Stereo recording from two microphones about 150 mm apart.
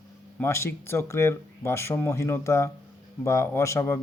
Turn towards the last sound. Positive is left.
turn(degrees=20)  # may be behind; listen again after turning